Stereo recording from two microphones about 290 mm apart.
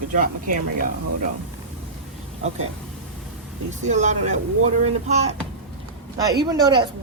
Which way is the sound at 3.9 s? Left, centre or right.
Right.